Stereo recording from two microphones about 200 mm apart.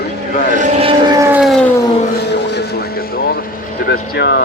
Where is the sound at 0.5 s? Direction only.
35° right (ahead or behind).